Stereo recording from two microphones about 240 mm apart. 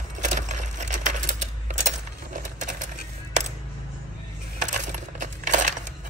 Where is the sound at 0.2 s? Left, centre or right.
Right.